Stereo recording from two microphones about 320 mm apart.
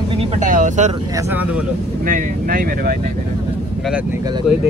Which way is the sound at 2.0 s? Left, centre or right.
Right.